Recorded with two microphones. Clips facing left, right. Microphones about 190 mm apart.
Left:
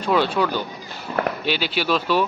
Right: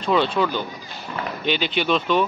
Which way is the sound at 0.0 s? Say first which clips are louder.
Even; 5° left (ahead or behind).